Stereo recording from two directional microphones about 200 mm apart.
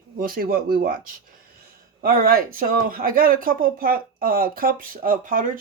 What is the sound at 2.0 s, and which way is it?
Speech, 45° right (ahead or behind).